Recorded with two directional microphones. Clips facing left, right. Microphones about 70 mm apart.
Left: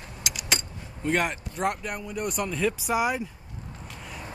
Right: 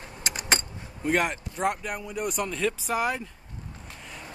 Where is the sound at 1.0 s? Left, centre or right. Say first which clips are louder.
Right 1 dB; centre.